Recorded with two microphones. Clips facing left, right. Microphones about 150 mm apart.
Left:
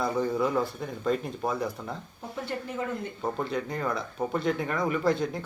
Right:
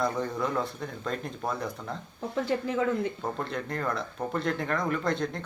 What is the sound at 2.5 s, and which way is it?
Speech, 90° right.